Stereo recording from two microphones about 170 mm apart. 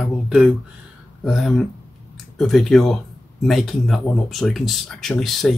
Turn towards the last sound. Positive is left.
turn(degrees=0)  # may be behind; listen again after turning